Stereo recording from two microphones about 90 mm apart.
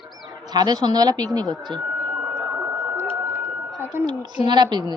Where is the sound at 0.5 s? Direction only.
50° right (ahead or behind).